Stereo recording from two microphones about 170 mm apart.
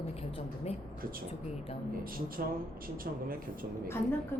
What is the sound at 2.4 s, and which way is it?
Speech, 55° right (ahead or behind).